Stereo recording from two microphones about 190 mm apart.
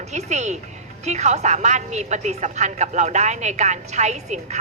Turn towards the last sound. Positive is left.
turn(degrees=-35)  # may be behind; listen again after turning